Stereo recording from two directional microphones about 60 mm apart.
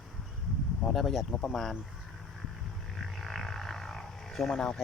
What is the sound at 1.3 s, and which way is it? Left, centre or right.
Speech, centre.